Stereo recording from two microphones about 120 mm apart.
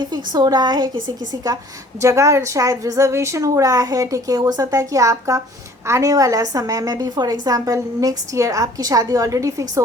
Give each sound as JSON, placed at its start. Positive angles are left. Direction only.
{"t": 0.0, "sound": "a woman's voice", "side_deg": -35}
{"t": 2.0, "sound": "a woman's voice", "side_deg": -25}